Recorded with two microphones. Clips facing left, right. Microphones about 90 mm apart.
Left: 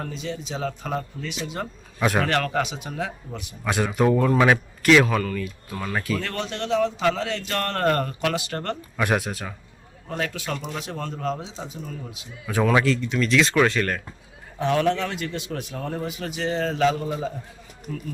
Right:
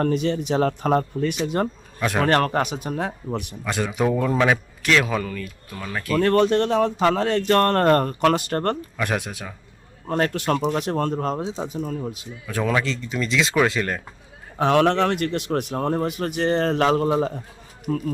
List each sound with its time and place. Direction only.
0.0 s a man's voice: 60° right (ahead or behind); by 3.4 s 45° right (ahead or behind)
3.6 s a man's voice: 5° left (ahead or behind)
6.1 s speech: 50° right (ahead or behind)
9.0 s a man's voice: 5° left (ahead or behind)
10.1 s speech: 55° right (ahead or behind)
12.7 s a man's voice: 5° left (ahead or behind)
14.6 s a man's voice: 70° right (ahead or behind)